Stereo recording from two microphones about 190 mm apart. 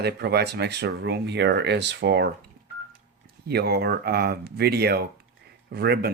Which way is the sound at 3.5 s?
55° right (ahead or behind).